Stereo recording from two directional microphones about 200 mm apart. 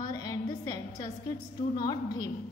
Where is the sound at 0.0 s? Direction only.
20° left (ahead or behind).